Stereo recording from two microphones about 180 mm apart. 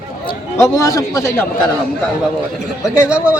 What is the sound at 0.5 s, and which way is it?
Speech, 15° left (ahead or behind).